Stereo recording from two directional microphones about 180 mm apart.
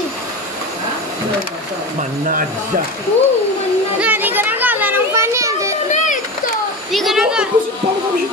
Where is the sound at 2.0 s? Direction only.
50° right (ahead or behind).